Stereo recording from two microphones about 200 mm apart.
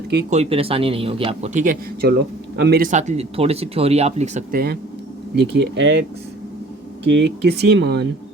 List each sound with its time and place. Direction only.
0.3 s a man's voice: 30° right (ahead or behind)
4.5 s speech: 50° right (ahead or behind)